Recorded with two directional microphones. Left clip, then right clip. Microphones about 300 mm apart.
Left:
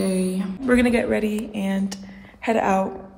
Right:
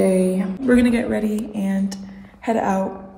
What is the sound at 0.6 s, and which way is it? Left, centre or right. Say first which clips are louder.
A woman's voice: right 1 dB; centre.